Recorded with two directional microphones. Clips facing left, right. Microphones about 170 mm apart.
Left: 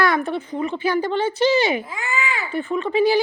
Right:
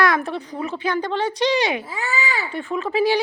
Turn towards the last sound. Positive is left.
turn(degrees=0)  # may be behind; listen again after turning